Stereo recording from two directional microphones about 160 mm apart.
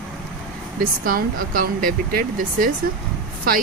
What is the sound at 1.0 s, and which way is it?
A woman's voice, 60° right (ahead or behind).